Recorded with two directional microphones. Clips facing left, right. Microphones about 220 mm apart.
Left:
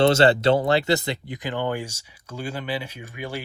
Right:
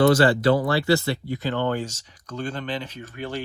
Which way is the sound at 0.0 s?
25° left (ahead or behind).